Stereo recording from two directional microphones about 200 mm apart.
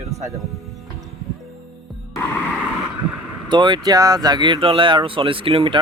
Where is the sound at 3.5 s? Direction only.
25° right (ahead or behind).